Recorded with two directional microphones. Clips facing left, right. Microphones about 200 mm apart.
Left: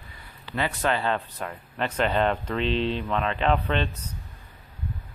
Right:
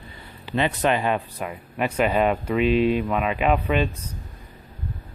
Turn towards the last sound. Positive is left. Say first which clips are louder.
# right 3 dB
turn(degrees=-10)  # may be behind; listen again after turning